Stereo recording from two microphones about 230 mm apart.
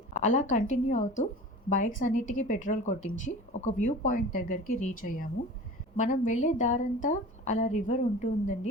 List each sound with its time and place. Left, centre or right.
0.1 s a woman's voice: left